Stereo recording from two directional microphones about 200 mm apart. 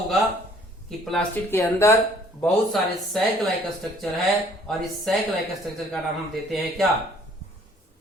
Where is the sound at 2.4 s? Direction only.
Centre (ahead or behind).